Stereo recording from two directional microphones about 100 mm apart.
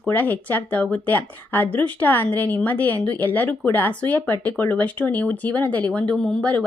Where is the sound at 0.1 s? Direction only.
15° left (ahead or behind).